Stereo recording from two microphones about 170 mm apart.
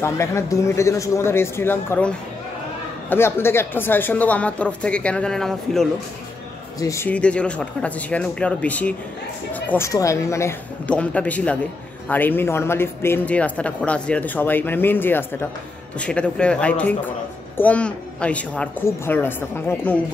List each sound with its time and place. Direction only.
0.0 s speech: 15° left (ahead or behind)
6.8 s speech: 15° left (ahead or behind)